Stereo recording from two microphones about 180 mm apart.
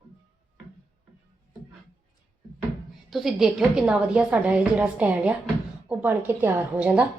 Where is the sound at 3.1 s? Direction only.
Centre (ahead or behind).